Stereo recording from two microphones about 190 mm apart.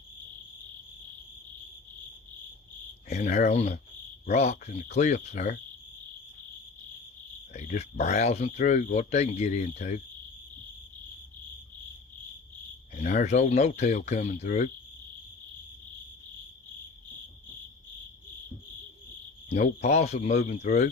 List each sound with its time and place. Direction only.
3.1 s speech: 40° left (ahead or behind)
7.5 s speech: 40° left (ahead or behind)
12.9 s speech: 45° left (ahead or behind)
19.5 s speech: 35° left (ahead or behind)